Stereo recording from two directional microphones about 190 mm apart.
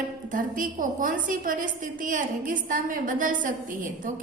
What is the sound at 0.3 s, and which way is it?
A woman's voice, 45° right (ahead or behind).